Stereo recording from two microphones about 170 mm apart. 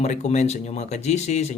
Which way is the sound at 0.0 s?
40° left (ahead or behind).